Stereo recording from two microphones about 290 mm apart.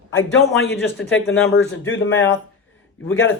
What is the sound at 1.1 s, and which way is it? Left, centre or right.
Speech, left.